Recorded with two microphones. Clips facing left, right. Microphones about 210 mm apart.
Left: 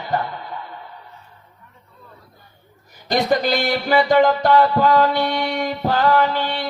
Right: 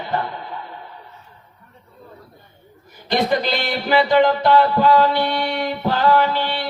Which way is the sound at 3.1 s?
45° left (ahead or behind).